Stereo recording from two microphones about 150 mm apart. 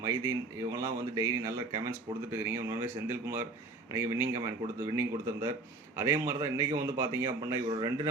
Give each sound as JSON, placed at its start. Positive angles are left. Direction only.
{"t": 0.7, "sound": "a man's voice", "side_deg": -20}